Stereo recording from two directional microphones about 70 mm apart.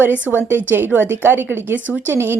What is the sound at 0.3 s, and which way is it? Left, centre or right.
Speech, centre.